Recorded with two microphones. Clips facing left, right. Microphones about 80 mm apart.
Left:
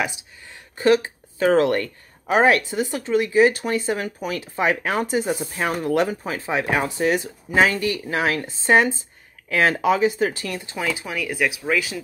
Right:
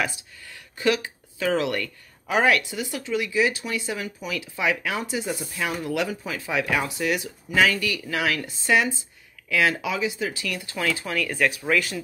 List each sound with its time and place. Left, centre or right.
0.0 s speech: left
0.7 s speech: left
10.8 s speech: centre